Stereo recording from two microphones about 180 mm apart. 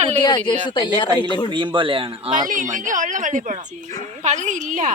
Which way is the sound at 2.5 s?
45° right (ahead or behind).